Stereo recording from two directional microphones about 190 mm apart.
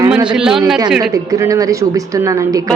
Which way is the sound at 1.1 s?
15° right (ahead or behind).